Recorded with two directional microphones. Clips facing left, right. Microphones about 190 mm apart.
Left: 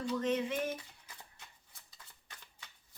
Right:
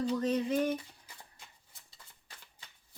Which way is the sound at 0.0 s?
35° right (ahead or behind).